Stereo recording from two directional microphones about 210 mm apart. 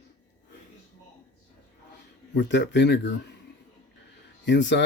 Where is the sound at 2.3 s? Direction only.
60° left (ahead or behind).